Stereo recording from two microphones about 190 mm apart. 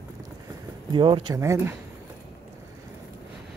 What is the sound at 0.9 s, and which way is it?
Speech, 25° right (ahead or behind).